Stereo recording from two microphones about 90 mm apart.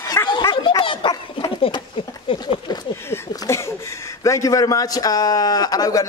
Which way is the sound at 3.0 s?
30° left (ahead or behind).